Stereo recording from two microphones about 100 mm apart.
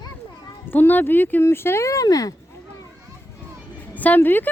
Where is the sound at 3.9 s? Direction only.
15° left (ahead or behind).